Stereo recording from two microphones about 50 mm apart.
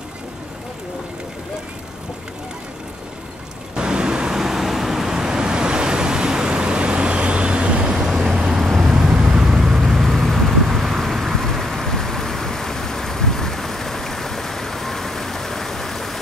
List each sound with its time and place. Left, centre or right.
3.7 s vehicle: centre
7.9 s vehicle: centre